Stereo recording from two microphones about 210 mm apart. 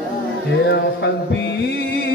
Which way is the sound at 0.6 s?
55° left (ahead or behind).